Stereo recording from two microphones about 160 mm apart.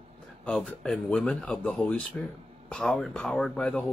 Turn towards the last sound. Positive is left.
turn(degrees=5)  # may be behind; listen again after turning